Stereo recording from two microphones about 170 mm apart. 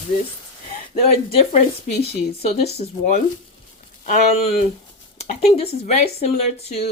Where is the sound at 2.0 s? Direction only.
35° left (ahead or behind).